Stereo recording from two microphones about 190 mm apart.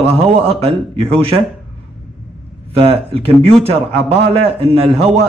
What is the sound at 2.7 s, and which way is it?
Speech, 30° right (ahead or behind).